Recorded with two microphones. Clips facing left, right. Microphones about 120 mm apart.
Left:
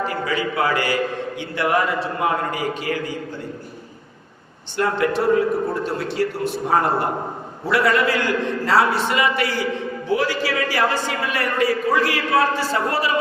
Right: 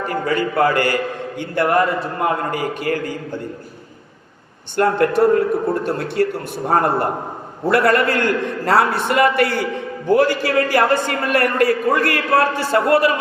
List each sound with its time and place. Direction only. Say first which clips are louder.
0.0 s a man's voice: right 3 dB; 50° right (ahead or behind)
4.8 s a man's voice: right 5 dB; 50° right (ahead or behind)